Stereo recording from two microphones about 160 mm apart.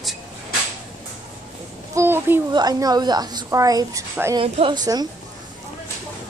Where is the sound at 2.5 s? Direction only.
25° right (ahead or behind).